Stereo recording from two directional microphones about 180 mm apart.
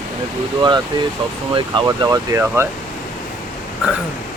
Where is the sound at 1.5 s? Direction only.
25° right (ahead or behind).